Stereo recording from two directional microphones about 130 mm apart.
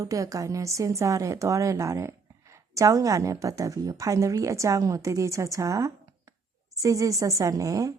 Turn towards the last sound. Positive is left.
turn(degrees=-25)  # may be behind; listen again after turning